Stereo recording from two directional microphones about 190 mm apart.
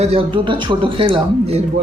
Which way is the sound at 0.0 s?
30° right (ahead or behind).